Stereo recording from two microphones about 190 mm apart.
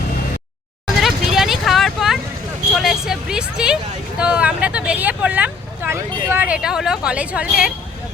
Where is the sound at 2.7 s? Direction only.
Centre (ahead or behind).